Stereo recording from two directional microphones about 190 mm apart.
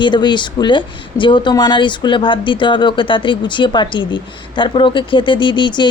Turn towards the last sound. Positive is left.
turn(degrees=25)  # may be behind; listen again after turning